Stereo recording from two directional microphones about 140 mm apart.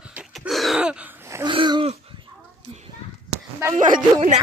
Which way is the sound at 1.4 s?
35° right (ahead or behind).